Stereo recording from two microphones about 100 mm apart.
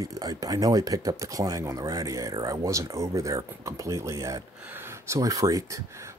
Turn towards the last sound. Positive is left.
turn(degrees=-35)  # may be behind; listen again after turning